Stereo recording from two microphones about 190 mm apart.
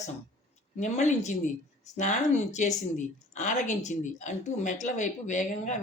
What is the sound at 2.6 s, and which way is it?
A woman's voice, 40° left (ahead or behind).